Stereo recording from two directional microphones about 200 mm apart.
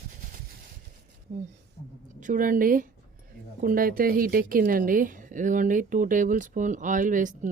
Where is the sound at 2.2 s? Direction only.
40° right (ahead or behind).